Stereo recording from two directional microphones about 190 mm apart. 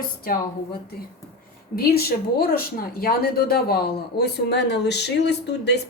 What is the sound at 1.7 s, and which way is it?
Speech, 55° left (ahead or behind).